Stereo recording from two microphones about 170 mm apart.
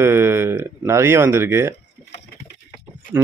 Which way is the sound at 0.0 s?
15° right (ahead or behind).